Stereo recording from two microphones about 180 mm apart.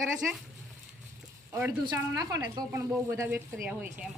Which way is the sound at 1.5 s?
20° right (ahead or behind).